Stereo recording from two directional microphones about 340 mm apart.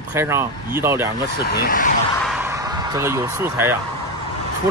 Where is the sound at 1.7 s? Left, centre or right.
Left.